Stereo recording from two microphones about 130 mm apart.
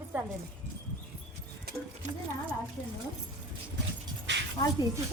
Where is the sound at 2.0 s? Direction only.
65° right (ahead or behind).